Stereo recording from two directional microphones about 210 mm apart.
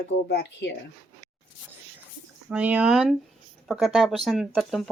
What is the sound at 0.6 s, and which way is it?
Speech, 50° left (ahead or behind).